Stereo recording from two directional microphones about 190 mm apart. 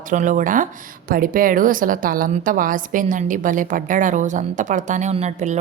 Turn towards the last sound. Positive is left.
turn(degrees=-35)  # may be behind; listen again after turning